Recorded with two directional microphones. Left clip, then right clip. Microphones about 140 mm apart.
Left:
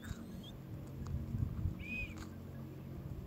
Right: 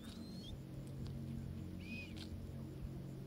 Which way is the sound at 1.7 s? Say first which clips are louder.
Left 8 dB; centre (ahead or behind).